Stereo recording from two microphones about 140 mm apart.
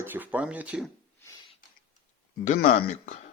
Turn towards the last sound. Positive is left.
turn(degrees=65)  # may be behind; listen again after turning